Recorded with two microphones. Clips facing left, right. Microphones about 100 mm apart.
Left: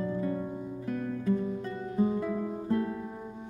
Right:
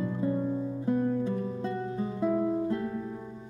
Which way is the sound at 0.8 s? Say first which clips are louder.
Right 5 dB; 25° right (ahead or behind).